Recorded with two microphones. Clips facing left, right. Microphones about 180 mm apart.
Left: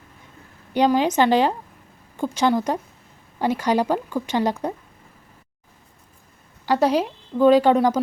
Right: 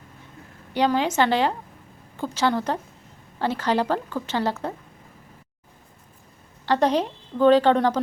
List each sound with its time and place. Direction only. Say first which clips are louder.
0.7 s a woman's voice: left 3 dB; 15° left (ahead or behind)
6.7 s a woman's voice: left 2 dB; 10° left (ahead or behind)